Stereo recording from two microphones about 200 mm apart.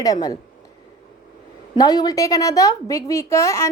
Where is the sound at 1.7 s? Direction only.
20° left (ahead or behind).